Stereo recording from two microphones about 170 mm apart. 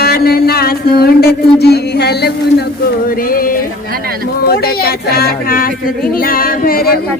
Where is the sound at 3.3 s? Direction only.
60° left (ahead or behind).